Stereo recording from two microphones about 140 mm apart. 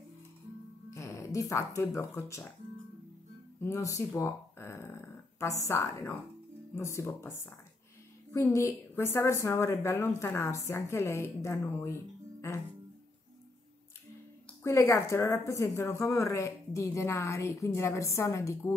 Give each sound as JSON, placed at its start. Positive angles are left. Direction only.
{"t": 0.8, "sound": "speech", "side_deg": 25}
{"t": 3.6, "sound": "a woman's voice", "side_deg": 20}
{"t": 4.1, "sound": "a sound", "side_deg": 20}
{"t": 5.7, "sound": "a woman's voice", "side_deg": 20}
{"t": 14.6, "sound": "a woman's voice", "side_deg": 20}